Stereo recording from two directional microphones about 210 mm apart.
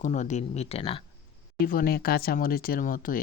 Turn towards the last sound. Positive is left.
turn(degrees=40)  # may be behind; listen again after turning